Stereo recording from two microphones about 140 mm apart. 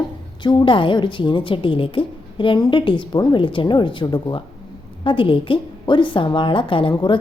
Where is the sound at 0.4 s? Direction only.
35° left (ahead or behind).